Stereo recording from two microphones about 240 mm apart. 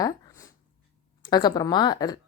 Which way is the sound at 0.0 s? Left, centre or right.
Centre.